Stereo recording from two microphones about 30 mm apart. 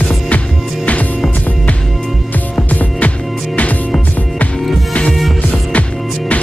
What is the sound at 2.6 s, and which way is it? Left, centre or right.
Music, left.